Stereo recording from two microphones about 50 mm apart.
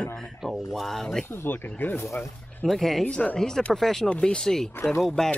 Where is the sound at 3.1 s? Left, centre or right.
Left.